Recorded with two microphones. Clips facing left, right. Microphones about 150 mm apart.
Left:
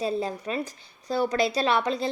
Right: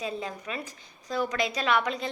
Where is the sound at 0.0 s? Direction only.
35° left (ahead or behind).